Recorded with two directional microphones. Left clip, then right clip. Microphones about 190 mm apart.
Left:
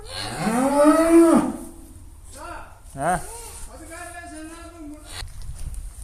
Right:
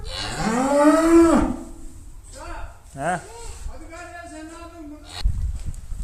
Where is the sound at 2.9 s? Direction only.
Centre (ahead or behind).